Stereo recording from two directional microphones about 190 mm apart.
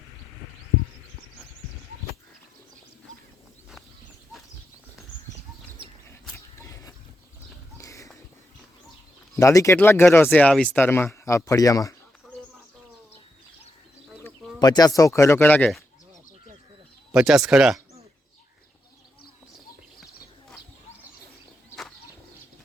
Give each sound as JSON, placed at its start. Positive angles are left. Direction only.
{"t": 6.3, "sound": "a sound", "side_deg": 15}
{"t": 9.3, "sound": "speech", "side_deg": 15}
{"t": 14.6, "sound": "speech", "side_deg": 20}
{"t": 17.1, "sound": "speech", "side_deg": -5}